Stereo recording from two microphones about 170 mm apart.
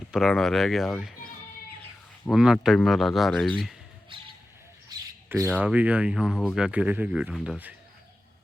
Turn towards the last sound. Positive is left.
turn(degrees=-10)  # may be behind; listen again after turning